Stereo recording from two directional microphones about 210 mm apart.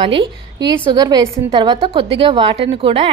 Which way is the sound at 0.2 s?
20° right (ahead or behind).